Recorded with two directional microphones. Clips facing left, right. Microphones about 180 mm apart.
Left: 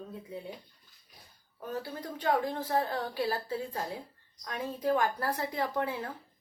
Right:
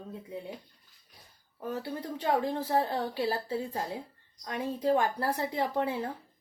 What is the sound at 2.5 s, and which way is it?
A woman's voice, 25° right (ahead or behind).